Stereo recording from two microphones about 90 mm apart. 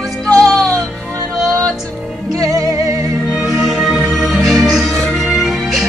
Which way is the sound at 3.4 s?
5° right (ahead or behind).